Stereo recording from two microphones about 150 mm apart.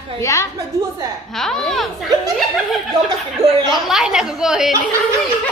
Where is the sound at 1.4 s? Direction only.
5° left (ahead or behind).